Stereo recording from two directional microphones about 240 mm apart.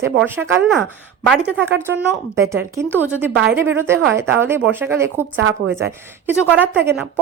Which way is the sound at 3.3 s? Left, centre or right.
Right.